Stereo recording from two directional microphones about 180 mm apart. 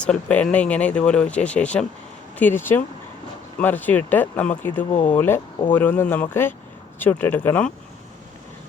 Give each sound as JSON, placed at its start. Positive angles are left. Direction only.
{"t": 0.0, "sound": "speech", "side_deg": 5}
{"t": 4.9, "sound": "speech", "side_deg": 35}
{"t": 5.1, "sound": "speech", "side_deg": 10}